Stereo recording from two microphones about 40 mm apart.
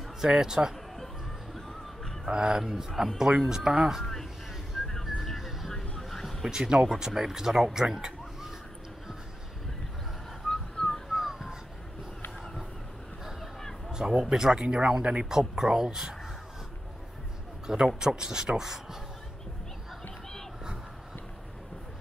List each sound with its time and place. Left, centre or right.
0.2 s speech: centre
0.9 s music: centre
2.2 s speech: centre
4.0 s speech: centre
4.7 s whistling: centre
5.2 s music: centre
5.7 s vehicle: centre
6.5 s a man's voice: centre
10.5 s whistling: centre
11.1 s a sound: centre
13.8 s speech: centre
15.2 s speech: centre
17.8 s speech: centre